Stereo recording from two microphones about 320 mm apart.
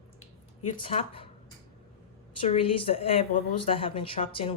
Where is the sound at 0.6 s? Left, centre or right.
Centre.